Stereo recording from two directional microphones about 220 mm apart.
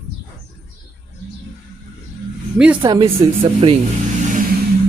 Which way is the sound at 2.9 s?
25° right (ahead or behind).